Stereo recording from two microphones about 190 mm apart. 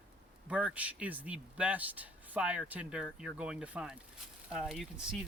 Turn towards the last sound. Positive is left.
turn(degrees=0)  # may be behind; listen again after turning